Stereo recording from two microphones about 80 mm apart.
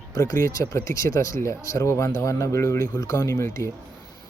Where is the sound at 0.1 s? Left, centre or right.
Left.